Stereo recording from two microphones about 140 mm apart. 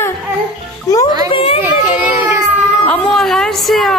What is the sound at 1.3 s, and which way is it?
Children playing, 40° left (ahead or behind).